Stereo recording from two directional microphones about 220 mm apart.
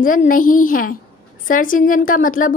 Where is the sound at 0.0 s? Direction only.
40° left (ahead or behind).